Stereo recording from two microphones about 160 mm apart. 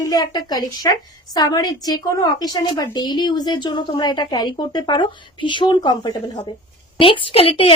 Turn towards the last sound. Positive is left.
turn(degrees=35)  # may be behind; listen again after turning